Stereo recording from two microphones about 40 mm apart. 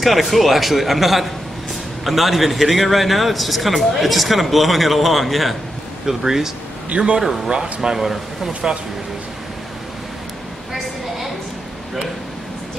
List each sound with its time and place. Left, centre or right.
0.0 s a man's voice: centre